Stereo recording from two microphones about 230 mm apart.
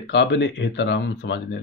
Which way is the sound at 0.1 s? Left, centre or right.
Left.